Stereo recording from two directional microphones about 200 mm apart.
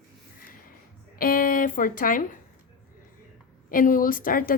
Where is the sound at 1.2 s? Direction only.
45° left (ahead or behind).